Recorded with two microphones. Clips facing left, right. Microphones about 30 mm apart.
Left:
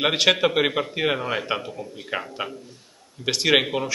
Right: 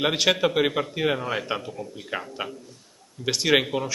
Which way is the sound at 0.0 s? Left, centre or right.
Centre.